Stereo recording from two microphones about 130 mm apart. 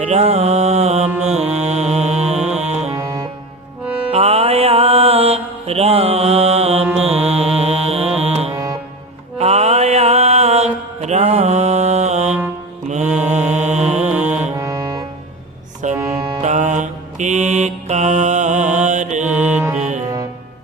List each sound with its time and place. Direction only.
0.1 s mantra: 55° right (ahead or behind)
1.3 s music: 55° right (ahead or behind)
2.9 s music: 25° right (ahead or behind)
4.1 s mantra: 50° right (ahead or behind)
7.0 s music: 50° right (ahead or behind)
9.4 s mantra: 55° right (ahead or behind)
14.0 s music: 10° right (ahead or behind)
14.5 s music: 20° right (ahead or behind)
15.8 s music: 70° right (ahead or behind)
16.4 s mantra: 65° right (ahead or behind)
19.3 s music: 15° right (ahead or behind)
19.7 s music: 70° right (ahead or behind)